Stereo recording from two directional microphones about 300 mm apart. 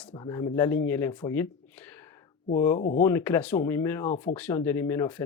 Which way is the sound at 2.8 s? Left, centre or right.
Left.